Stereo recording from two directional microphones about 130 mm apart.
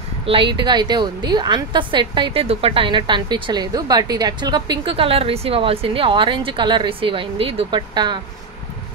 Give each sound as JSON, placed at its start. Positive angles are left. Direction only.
{"t": 0.2, "sound": "a woman's voice", "side_deg": -45}